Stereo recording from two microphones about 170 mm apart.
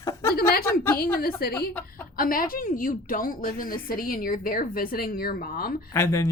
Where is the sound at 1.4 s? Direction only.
65° left (ahead or behind).